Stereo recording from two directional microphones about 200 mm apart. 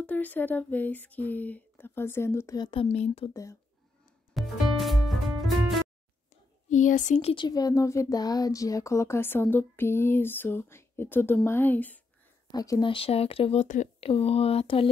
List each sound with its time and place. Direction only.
0.0 s speech: 10° left (ahead or behind); by 3.3 s 30° left (ahead or behind)
4.3 s music: centre (ahead or behind)
6.7 s speech: 40° left (ahead or behind)